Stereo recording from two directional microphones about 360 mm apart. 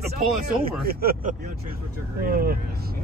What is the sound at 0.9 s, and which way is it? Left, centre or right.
Speech, right.